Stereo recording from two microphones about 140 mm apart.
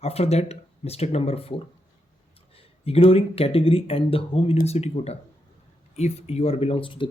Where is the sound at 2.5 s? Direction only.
45° left (ahead or behind).